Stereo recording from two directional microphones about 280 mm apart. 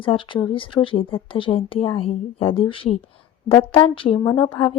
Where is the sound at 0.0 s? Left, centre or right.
Centre.